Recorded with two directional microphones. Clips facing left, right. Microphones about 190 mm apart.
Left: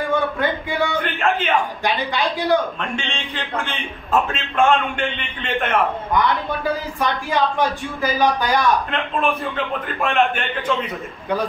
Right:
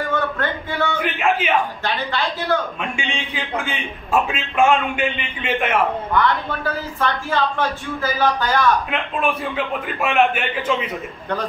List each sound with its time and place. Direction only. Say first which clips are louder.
0.1 s a sound: left 2 dB; 15° left (ahead or behind)
1.0 s bellow: right 1 dB; 5° right (ahead or behind)
1.9 s speech: left 2 dB; 15° left (ahead or behind)
2.8 s a man's voice: even; 15° right (ahead or behind)
3.5 s a man's voice: right 1 dB; centre (ahead or behind)
6.1 s speech: left 1 dB; 15° left (ahead or behind)
9.2 s a man's voice: right 1 dB; 5° right (ahead or behind)